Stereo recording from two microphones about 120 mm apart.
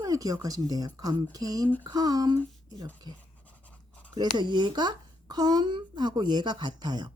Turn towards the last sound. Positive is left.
turn(degrees=-35)  # may be behind; listen again after turning